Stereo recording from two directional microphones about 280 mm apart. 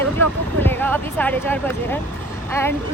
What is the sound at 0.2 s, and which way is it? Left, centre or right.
Speech, centre.